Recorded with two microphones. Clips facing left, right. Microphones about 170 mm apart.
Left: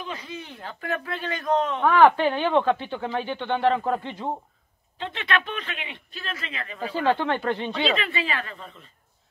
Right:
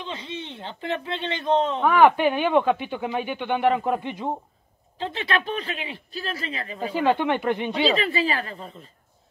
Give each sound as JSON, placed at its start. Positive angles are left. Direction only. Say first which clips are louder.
{"t": 0.0, "sound": "speech", "louder": "right 2 dB", "side_deg": -25}
{"t": 1.8, "sound": "speech", "louder": "left 1 dB", "side_deg": -15}
{"t": 4.9, "sound": "speech", "louder": "right 1 dB", "side_deg": -35}
{"t": 6.8, "sound": "speech", "louder": "right 2 dB", "side_deg": -15}
{"t": 7.8, "sound": "speech", "louder": "right 5 dB", "side_deg": -35}